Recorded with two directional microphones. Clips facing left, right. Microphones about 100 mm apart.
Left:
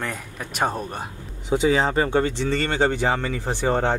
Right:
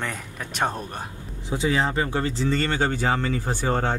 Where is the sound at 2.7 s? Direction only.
20° left (ahead or behind).